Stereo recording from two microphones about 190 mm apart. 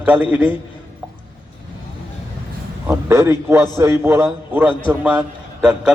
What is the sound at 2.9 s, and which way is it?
A man's voice, 15° right (ahead or behind).